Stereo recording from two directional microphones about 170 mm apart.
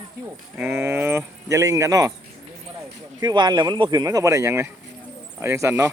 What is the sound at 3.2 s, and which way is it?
Speech, 25° right (ahead or behind).